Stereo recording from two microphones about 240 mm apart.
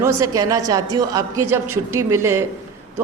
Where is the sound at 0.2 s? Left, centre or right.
Centre.